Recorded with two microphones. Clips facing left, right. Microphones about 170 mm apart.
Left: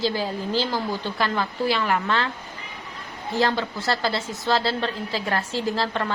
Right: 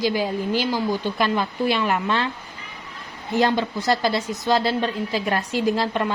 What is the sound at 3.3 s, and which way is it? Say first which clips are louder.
A woman's voice: right 3 dB; 15° right (ahead or behind).